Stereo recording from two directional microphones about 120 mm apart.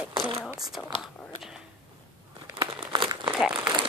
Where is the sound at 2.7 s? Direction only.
40° right (ahead or behind).